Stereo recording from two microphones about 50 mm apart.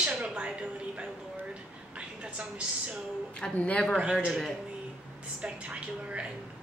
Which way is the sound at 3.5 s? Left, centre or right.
Left.